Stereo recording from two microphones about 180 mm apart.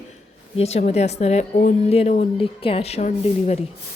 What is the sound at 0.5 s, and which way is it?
A woman's voice, 35° left (ahead or behind).